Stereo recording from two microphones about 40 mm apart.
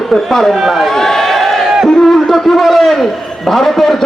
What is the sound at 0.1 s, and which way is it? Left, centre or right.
Speech, centre.